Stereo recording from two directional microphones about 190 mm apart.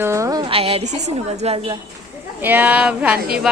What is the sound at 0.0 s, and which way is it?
A woman's voice, 15° right (ahead or behind).